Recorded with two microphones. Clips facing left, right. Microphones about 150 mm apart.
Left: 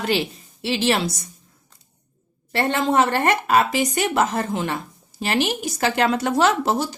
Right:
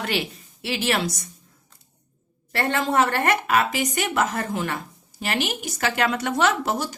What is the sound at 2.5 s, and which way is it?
A woman's voice, 20° left (ahead or behind).